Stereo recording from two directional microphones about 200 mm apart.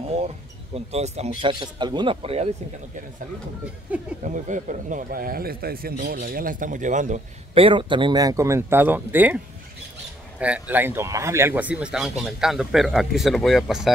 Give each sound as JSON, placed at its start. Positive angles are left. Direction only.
{"t": 0.0, "sound": "a sound", "side_deg": -30}
{"t": 0.7, "sound": "a man's voice", "side_deg": -30}
{"t": 4.2, "sound": "a man's voice", "side_deg": -40}
{"t": 10.4, "sound": "speech", "side_deg": -10}